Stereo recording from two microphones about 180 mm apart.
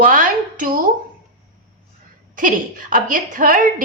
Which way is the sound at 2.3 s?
50° right (ahead or behind).